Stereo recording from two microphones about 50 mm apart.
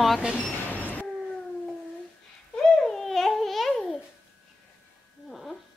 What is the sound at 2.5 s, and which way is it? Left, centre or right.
Babbling, centre.